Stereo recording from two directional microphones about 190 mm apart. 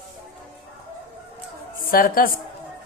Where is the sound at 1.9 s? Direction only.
50° left (ahead or behind).